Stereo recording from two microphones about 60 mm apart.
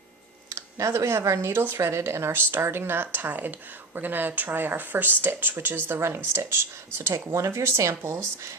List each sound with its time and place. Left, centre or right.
0.8 s speech: right